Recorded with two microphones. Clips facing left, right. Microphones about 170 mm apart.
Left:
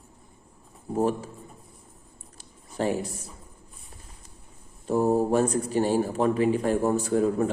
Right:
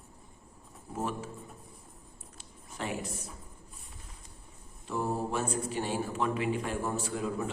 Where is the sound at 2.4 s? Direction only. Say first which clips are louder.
Left 11 dB; 40° left (ahead or behind).